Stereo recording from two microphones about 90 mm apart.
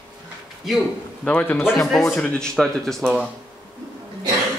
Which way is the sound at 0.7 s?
Centre (ahead or behind).